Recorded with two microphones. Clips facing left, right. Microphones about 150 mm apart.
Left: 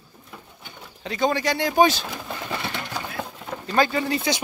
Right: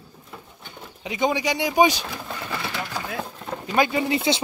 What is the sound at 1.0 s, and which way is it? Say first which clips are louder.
Speech: even; 15° right (ahead or behind).